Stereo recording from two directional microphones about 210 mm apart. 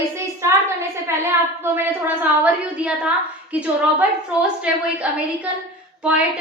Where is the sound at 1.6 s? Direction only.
10° right (ahead or behind).